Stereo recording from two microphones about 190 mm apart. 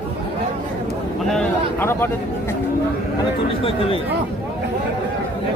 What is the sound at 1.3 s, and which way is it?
Speech, centre (ahead or behind).